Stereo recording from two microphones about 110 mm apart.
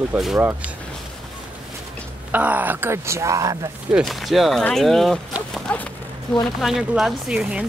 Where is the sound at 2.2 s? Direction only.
15° right (ahead or behind); by 3.5 s 30° right (ahead or behind).